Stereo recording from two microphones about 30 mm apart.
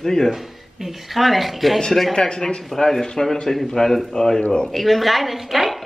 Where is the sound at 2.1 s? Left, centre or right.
Left.